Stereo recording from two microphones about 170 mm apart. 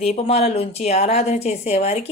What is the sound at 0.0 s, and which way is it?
A woman's voice, 40° left (ahead or behind).